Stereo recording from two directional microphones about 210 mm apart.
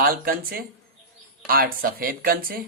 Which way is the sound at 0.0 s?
45° right (ahead or behind).